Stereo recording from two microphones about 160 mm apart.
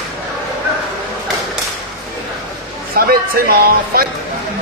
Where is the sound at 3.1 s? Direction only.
70° right (ahead or behind).